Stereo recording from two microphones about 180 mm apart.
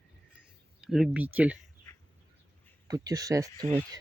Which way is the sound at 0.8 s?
Centre (ahead or behind).